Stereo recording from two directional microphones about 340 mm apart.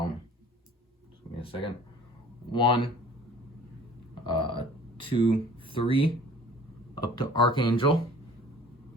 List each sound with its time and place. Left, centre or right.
1.4 s speech: centre
4.3 s speech: centre